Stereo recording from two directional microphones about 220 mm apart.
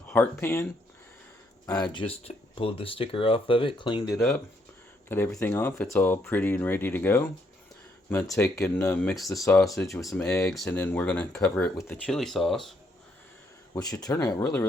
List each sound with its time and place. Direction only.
0.1 s speech: 10° left (ahead or behind)
5.0 s speech: 10° left (ahead or behind)
9.3 s speech: 15° left (ahead or behind)
10.0 s speech: 5° left (ahead or behind)
13.7 s speech: 15° left (ahead or behind)